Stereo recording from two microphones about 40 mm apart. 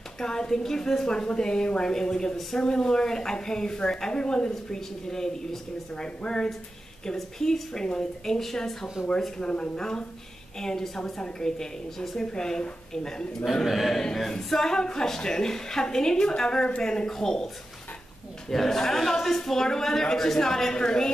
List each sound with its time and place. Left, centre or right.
0.2 s a woman's voice: centre
7.2 s a woman's voice: centre
9.0 s speech: centre
9.4 s a woman's voice: left
13.7 s a woman's voice: centre
18.5 s a woman's voice: centre